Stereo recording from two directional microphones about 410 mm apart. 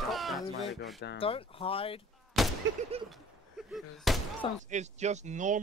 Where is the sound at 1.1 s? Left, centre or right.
Centre.